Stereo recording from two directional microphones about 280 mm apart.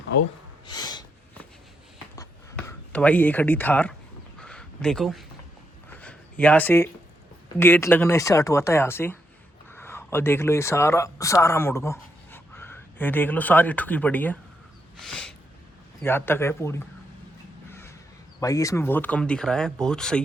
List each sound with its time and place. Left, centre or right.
0.1 s speech: left
0.7 s snort: centre
2.1 s a sound: centre
7.6 s speech: centre
15.0 s a sound: centre
16.0 s speech: centre
17.7 s crow: centre
18.3 s speech: centre